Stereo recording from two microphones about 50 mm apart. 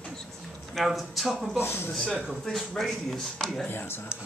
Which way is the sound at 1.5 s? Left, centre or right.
Left.